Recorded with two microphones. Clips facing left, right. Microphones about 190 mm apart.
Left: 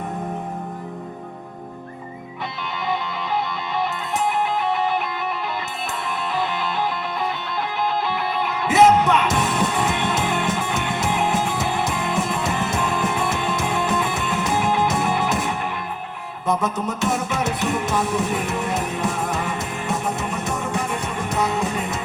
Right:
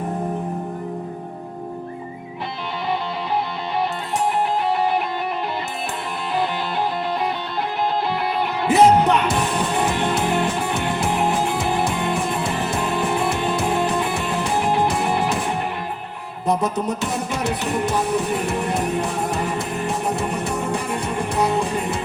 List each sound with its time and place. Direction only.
8.6 s music: 35° right (ahead or behind)